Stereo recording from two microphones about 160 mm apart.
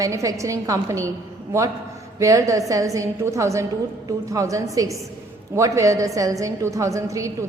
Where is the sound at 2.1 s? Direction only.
20° right (ahead or behind).